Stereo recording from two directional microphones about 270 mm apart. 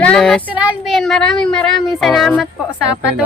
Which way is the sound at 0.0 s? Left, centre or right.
Centre.